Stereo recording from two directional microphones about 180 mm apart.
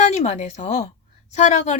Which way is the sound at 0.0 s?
40° left (ahead or behind).